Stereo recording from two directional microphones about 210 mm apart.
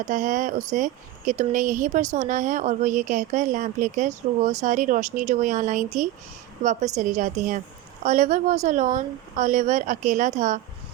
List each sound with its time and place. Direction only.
0.1 s speech: 35° right (ahead or behind)